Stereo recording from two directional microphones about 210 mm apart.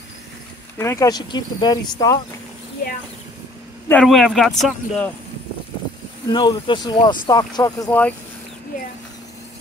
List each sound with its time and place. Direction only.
0.7 s speech: 15° left (ahead or behind)
3.9 s speech: 5° left (ahead or behind)
6.3 s speech: 20° left (ahead or behind)